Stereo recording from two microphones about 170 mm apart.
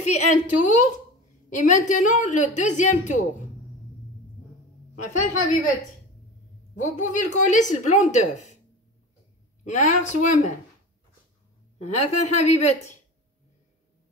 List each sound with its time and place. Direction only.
0.0 s a woman's voice: 45° left (ahead or behind)
5.0 s a woman's voice: 45° left (ahead or behind)
6.8 s a woman's voice: 45° left (ahead or behind)
9.8 s a woman's voice: 45° left (ahead or behind)
11.8 s a woman's voice: 40° left (ahead or behind)